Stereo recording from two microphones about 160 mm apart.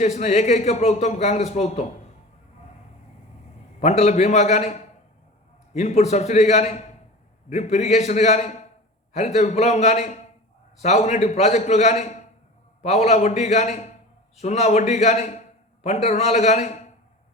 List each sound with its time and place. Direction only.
0.0 s speech: 45° left (ahead or behind)
3.8 s speech: 45° left (ahead or behind)